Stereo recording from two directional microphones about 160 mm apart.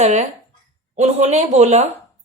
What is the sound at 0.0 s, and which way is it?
A woman's voice, 45° right (ahead or behind).